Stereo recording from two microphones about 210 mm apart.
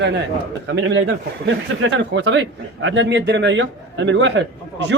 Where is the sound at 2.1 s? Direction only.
60° right (ahead or behind).